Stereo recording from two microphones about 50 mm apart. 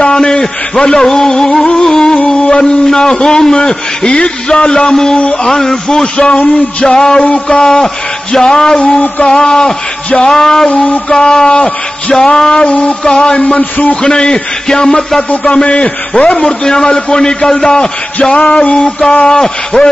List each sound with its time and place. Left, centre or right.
0.0 s a man's voice: centre
10.7 s a man's voice: left
11.1 s a man's voice: centre
13.4 s a man's voice: left
14.0 s a man's voice: centre